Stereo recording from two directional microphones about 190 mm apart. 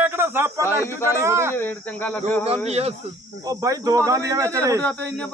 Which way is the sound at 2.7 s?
35° right (ahead or behind).